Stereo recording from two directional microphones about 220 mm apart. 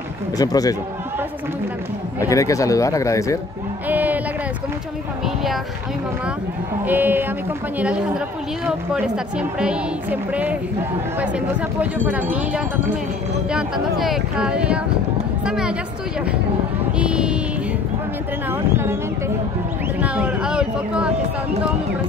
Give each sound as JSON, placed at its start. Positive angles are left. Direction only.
{"t": 0.4, "sound": "speech", "side_deg": 15}
{"t": 2.1, "sound": "speech", "side_deg": 15}
{"t": 3.9, "sound": "a sound", "side_deg": -10}
{"t": 5.2, "sound": "speech", "side_deg": 0}
{"t": 6.9, "sound": "speech", "side_deg": -10}
{"t": 8.6, "sound": "speech", "side_deg": -5}
{"t": 17.0, "sound": "a sound", "side_deg": -5}
{"t": 18.5, "sound": "a sound", "side_deg": -10}
{"t": 20.0, "sound": "speech", "side_deg": -5}